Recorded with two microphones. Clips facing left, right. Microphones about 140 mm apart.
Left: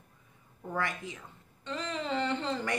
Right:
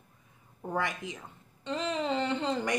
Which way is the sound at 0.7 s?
20° right (ahead or behind).